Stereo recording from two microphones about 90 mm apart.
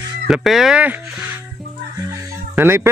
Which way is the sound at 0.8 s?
20° right (ahead or behind).